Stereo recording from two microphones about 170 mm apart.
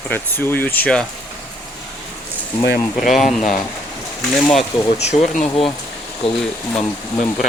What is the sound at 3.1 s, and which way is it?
Speech, centre (ahead or behind).